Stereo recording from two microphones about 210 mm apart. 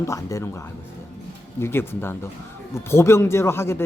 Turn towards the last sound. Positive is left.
turn(degrees=10)  # may be behind; listen again after turning